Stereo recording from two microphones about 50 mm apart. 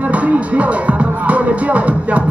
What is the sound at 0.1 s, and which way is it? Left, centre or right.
Music, right.